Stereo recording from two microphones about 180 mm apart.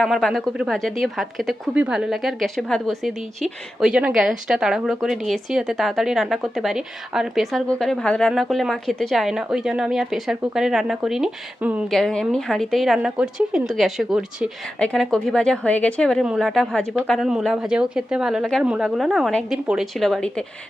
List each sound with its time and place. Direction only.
0.0 s speech: centre (ahead or behind)